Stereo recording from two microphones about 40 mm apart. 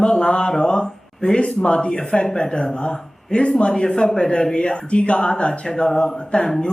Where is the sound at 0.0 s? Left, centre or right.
Left.